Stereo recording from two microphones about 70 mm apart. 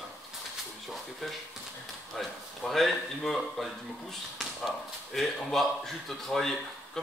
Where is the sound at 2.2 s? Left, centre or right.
Centre.